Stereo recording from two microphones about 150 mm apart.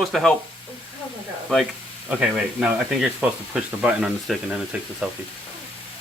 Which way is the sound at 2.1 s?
5° right (ahead or behind).